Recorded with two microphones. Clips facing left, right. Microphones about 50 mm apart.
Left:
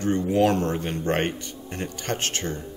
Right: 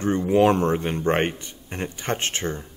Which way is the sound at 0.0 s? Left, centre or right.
Right.